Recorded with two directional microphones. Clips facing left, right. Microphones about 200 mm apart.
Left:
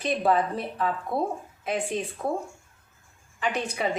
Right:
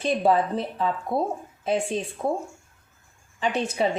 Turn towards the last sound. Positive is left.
turn(degrees=-25)  # may be behind; listen again after turning